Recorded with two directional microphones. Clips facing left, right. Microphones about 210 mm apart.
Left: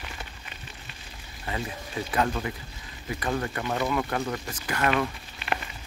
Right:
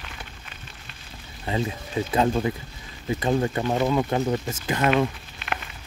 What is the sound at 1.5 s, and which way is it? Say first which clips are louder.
Speech: right 6 dB; 25° right (ahead or behind).